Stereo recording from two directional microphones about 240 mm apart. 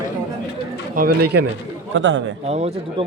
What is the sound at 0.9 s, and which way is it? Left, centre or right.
A man's voice, right.